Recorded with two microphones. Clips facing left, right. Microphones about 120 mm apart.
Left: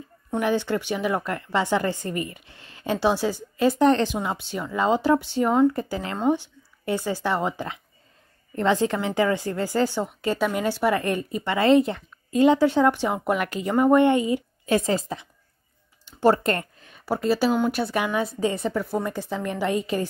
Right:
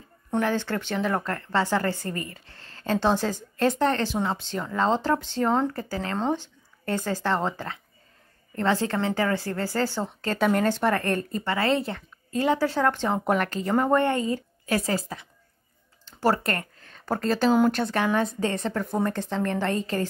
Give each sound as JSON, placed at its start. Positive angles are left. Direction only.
{"t": 0.4, "sound": "speech", "side_deg": 15}
{"t": 13.5, "sound": "speech", "side_deg": 15}